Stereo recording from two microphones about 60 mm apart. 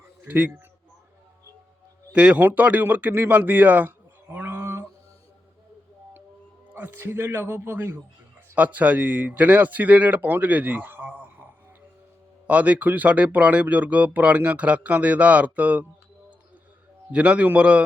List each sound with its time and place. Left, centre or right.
0.3 s speech: right
2.1 s speech: centre
2.4 s speech: right
3.1 s a sound: right
6.7 s speech: right
8.5 s speech: right
17.1 s speech: right